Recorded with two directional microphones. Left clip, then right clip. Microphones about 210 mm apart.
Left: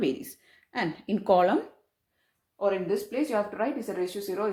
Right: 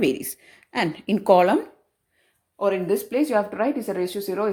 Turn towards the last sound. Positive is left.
turn(degrees=-40)  # may be behind; listen again after turning